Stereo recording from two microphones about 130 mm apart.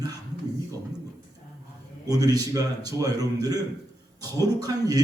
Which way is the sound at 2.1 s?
30° right (ahead or behind).